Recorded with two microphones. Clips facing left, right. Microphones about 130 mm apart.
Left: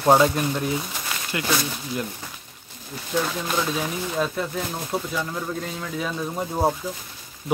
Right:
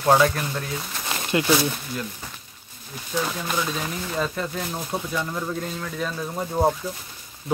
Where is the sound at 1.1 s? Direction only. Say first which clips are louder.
Right 5 dB; 25° right (ahead or behind).